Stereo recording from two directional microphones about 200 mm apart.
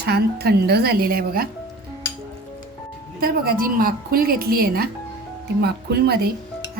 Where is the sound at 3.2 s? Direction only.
50° right (ahead or behind).